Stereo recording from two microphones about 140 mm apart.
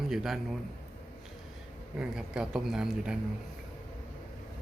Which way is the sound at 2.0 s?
5° right (ahead or behind).